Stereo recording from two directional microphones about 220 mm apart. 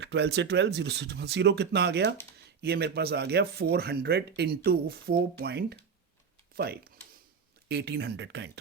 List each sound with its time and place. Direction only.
0.0 s speech: 50° right (ahead or behind)